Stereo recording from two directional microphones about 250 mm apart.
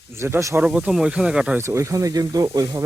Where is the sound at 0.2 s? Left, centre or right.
Centre.